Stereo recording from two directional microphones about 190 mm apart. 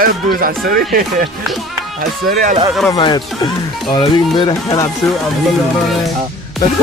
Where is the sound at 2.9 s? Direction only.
25° left (ahead or behind).